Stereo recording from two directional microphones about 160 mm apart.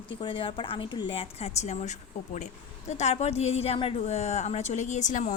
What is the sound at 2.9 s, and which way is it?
Speech, 45° left (ahead or behind).